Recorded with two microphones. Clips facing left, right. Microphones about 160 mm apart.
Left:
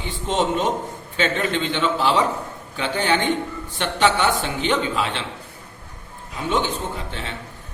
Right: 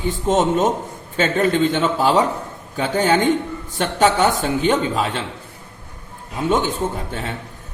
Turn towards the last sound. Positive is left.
turn(degrees=-45)  # may be behind; listen again after turning